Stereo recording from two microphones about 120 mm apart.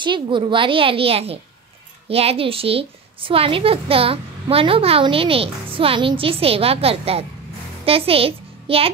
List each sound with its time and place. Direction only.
0.0 s a woman's voice: 40° right (ahead or behind)